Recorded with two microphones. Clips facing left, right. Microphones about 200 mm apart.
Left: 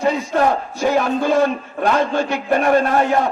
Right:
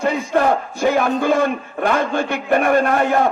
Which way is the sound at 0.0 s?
55° right (ahead or behind).